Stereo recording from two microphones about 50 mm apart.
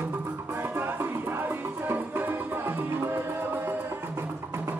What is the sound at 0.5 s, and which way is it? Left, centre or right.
Music, right.